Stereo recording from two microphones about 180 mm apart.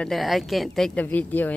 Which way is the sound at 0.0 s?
Centre (ahead or behind).